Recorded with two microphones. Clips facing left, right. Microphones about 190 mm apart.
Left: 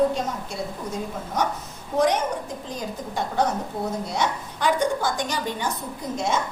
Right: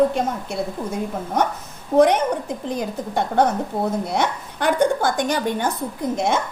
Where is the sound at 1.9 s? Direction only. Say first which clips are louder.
Right 6 dB; 60° right (ahead or behind).